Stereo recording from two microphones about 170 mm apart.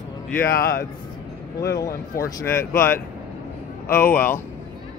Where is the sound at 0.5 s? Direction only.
60° left (ahead or behind).